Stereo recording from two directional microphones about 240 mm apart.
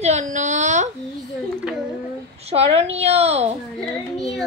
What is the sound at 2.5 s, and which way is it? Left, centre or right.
A woman's voice, right.